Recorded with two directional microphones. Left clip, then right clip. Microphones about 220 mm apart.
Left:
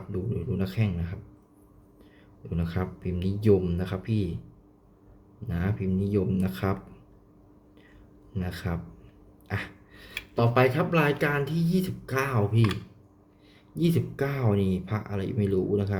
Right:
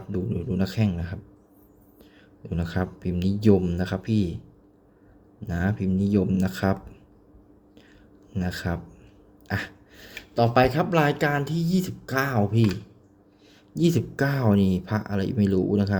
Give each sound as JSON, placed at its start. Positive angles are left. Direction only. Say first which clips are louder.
{"t": 0.1, "sound": "speech", "louder": "right 3 dB", "side_deg": -20}
{"t": 2.4, "sound": "speech", "louder": "right 3 dB", "side_deg": -20}
{"t": 5.5, "sound": "speech", "louder": "right 4 dB", "side_deg": -20}
{"t": 8.3, "sound": "speech", "louder": "right 5 dB", "side_deg": -20}
{"t": 13.7, "sound": "speech", "louder": "right 4 dB", "side_deg": -20}